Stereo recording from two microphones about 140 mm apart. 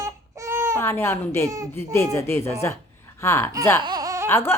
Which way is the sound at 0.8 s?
15° left (ahead or behind).